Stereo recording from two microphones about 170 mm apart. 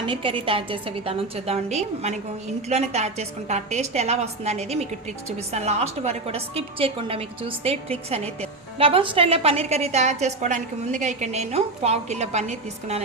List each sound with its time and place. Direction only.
0.0 s a woman's voice: 30° right (ahead or behind)